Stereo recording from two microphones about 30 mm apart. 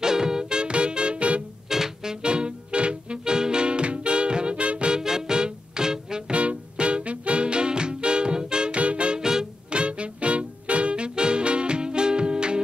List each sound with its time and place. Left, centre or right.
0.0 s music: centre; by 1.4 s right
1.7 s music: centre
2.2 s music: right
4.9 s music: right
6.3 s music: right
8.7 s music: right
9.2 s music: right
9.7 s music: right